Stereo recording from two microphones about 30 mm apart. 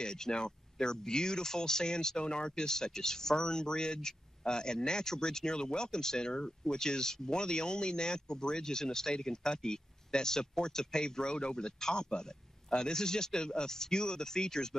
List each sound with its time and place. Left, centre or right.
0.0 s speech: left